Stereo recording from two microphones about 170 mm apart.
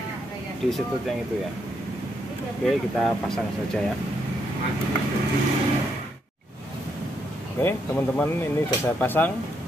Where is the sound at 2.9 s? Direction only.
Centre (ahead or behind).